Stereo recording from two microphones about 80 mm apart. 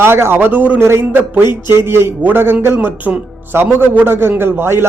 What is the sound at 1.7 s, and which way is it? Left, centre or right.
A man's voice, right.